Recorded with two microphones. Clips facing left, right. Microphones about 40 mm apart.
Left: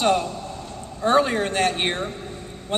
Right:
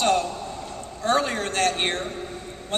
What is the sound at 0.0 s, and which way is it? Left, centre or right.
A man's voice, centre.